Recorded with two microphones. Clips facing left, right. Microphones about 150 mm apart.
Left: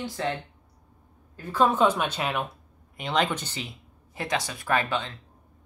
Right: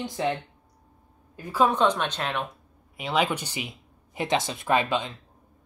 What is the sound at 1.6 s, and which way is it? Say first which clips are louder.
Speech: even; 5° left (ahead or behind).